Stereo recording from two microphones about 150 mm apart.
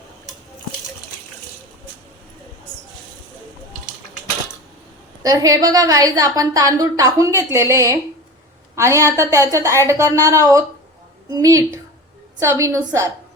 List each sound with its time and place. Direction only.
5.2 s a woman's voice: 25° right (ahead or behind)